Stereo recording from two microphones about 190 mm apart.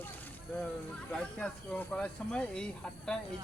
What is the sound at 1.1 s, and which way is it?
Speech, 5° left (ahead or behind).